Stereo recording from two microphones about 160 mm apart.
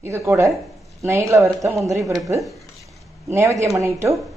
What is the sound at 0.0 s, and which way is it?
A woman's voice, 15° right (ahead or behind).